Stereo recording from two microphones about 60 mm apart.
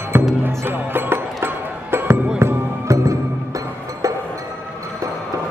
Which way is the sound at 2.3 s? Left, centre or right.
Right.